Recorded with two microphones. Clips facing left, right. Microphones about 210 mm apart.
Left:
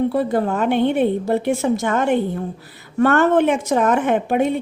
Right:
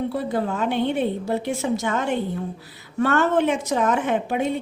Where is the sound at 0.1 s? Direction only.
50° left (ahead or behind).